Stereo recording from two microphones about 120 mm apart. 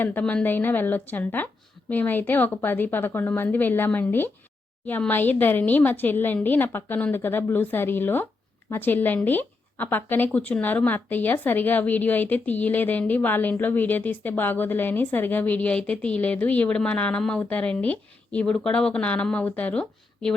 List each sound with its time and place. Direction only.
0.0 s speech: 15° left (ahead or behind)